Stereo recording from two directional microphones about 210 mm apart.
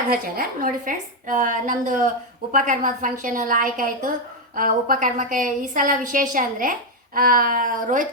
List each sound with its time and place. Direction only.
0.1 s a woman's voice: 45° right (ahead or behind)